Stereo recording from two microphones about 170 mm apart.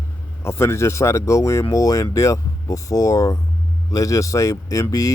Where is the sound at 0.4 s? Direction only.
15° left (ahead or behind).